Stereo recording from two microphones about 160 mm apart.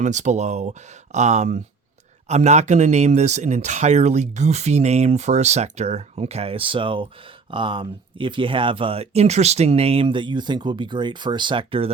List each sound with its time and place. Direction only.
0.0 s speech: 50° right (ahead or behind)